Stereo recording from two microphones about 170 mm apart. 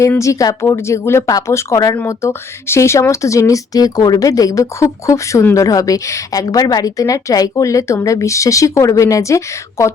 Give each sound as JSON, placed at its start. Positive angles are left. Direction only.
{"t": 0.0, "sound": "speech", "side_deg": 20}